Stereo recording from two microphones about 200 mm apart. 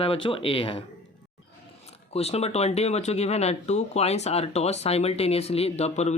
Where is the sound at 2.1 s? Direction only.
30° left (ahead or behind).